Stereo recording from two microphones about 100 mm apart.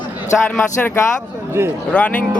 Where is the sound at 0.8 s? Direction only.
15° left (ahead or behind).